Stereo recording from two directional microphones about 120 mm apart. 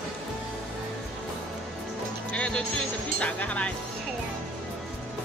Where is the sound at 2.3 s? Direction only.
10° left (ahead or behind).